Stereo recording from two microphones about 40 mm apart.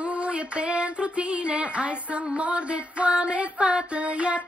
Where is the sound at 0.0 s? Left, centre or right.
Right.